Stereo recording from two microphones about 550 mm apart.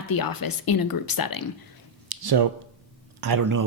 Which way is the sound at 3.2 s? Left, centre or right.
Right.